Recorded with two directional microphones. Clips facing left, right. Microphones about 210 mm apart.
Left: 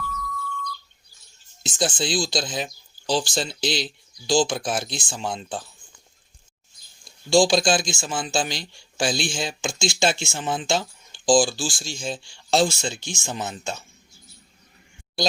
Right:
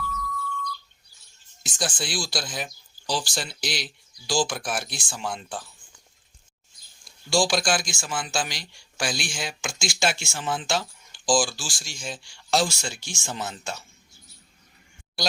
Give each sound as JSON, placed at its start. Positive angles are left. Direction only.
{"t": 0.0, "sound": "music", "side_deg": 0}
{"t": 1.6, "sound": "speech", "side_deg": 25}
{"t": 7.0, "sound": "speech", "side_deg": 20}